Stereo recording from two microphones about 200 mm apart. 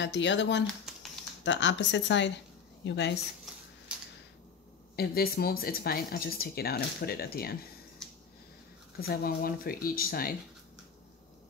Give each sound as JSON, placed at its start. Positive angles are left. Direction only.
{"t": 0.0, "sound": "a woman's voice", "side_deg": 60}
{"t": 4.9, "sound": "speech", "side_deg": 50}
{"t": 9.0, "sound": "speech", "side_deg": 50}